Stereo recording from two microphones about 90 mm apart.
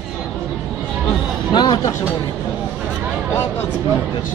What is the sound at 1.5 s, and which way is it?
Vehicle, 55° left (ahead or behind).